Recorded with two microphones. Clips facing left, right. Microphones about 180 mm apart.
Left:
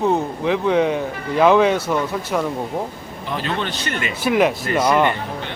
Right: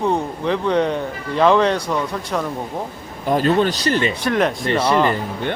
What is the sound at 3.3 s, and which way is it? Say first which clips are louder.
Speech: right 8 dB; 45° right (ahead or behind).